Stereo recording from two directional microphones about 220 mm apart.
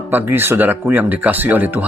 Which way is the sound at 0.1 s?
10° right (ahead or behind).